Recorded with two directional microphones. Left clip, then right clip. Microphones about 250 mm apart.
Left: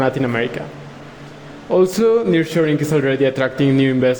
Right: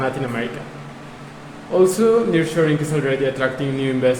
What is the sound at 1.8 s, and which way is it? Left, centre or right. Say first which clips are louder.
Speech: left 1 dB; left.